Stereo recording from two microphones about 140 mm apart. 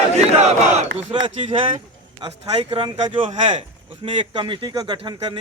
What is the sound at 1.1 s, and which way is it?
Speech, 40° right (ahead or behind).